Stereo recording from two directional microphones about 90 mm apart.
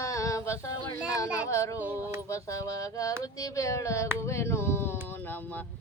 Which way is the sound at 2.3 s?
35° left (ahead or behind).